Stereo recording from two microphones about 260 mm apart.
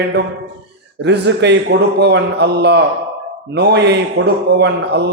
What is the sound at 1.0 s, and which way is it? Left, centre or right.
A man's voice, right.